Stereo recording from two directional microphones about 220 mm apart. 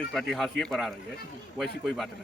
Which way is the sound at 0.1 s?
Centre (ahead or behind).